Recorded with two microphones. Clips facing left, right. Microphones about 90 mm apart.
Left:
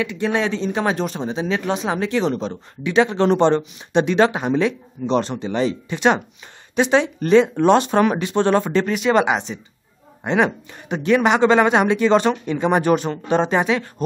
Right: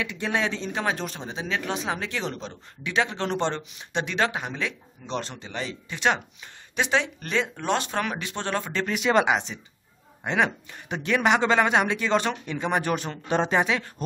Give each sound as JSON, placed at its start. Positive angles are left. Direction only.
{"t": 0.2, "sound": "speech", "side_deg": 5}
{"t": 9.1, "sound": "speech", "side_deg": 5}
{"t": 13.0, "sound": "speech", "side_deg": 5}